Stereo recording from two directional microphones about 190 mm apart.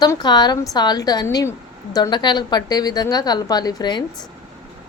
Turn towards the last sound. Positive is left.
turn(degrees=20)  # may be behind; listen again after turning